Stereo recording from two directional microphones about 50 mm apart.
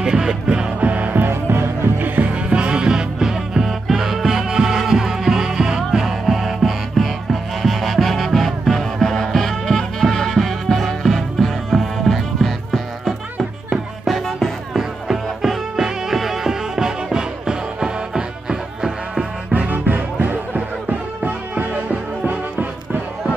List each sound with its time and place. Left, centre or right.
0.0 s music: centre
0.7 s music: right
1.3 s music: right; by 13.1 s centre
13.4 s music: centre
14.1 s music: centre
14.8 s music: centre
19.5 s music: right